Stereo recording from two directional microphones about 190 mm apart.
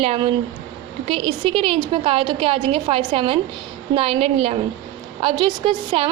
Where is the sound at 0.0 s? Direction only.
30° right (ahead or behind).